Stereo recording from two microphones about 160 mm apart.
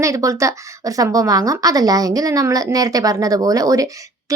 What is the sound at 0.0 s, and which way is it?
Speech, 20° right (ahead or behind).